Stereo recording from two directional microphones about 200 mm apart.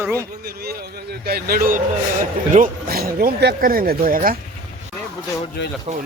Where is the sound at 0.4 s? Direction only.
50° right (ahead or behind).